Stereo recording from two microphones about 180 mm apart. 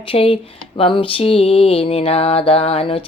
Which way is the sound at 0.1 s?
30° left (ahead or behind).